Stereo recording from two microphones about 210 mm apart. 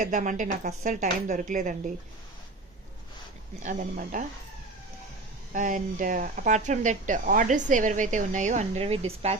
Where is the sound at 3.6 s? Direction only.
35° right (ahead or behind).